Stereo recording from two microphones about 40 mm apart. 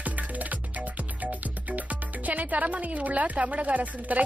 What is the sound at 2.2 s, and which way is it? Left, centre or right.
A woman's voice, right.